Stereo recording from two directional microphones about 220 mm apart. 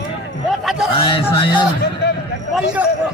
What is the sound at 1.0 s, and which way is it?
Speech, 25° left (ahead or behind).